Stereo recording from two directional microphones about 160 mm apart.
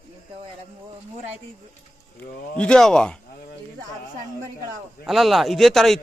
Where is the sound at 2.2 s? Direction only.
5° left (ahead or behind).